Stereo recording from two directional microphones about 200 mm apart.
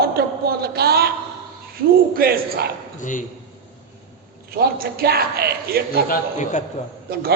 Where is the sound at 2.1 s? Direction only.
50° right (ahead or behind).